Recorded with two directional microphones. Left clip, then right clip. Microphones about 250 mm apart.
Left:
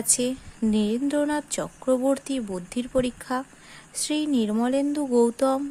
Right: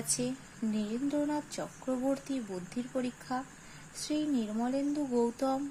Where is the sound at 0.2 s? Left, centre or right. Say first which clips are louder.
Left 9 dB; left.